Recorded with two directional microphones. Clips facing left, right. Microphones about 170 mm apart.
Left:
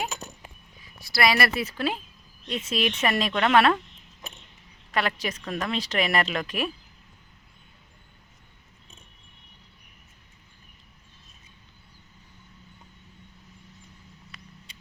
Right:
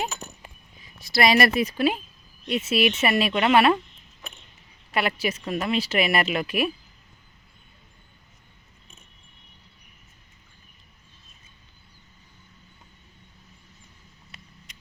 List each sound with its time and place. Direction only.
1.0 s speech: 20° right (ahead or behind)
4.9 s speech: 10° right (ahead or behind)